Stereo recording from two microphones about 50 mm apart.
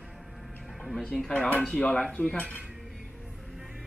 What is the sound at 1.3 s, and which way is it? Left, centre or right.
Speech, left.